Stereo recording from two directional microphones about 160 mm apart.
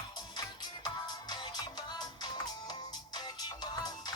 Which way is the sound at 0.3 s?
25° left (ahead or behind).